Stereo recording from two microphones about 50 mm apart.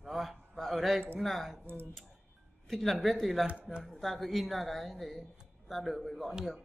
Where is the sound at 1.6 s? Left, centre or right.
Right.